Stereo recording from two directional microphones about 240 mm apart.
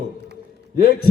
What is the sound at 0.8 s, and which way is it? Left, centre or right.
Speech, left.